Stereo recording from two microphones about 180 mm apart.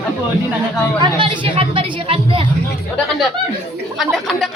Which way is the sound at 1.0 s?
25° right (ahead or behind).